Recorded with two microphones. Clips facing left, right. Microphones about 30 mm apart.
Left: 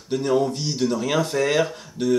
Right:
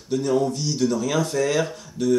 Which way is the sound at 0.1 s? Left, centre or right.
Left.